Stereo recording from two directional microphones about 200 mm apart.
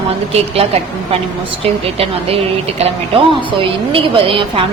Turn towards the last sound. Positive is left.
turn(degrees=-25)  # may be behind; listen again after turning